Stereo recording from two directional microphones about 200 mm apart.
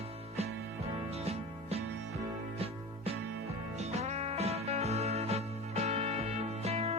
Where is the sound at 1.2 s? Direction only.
30° right (ahead or behind).